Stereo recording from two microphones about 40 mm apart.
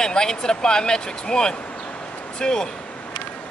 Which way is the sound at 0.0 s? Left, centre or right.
Centre.